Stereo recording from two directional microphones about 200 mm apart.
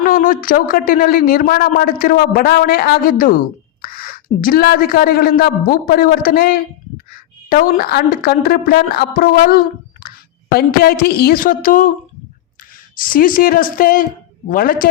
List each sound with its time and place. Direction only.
0.0 s speech: 45° left (ahead or behind)
10.0 s a sound: 50° left (ahead or behind)
10.5 s speech: 50° left (ahead or behind)
13.0 s speech: 45° left (ahead or behind)